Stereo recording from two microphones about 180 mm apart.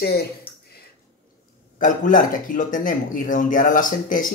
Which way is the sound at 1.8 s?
45° left (ahead or behind).